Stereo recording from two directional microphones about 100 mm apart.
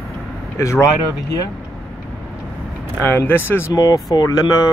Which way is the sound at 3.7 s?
40° left (ahead or behind).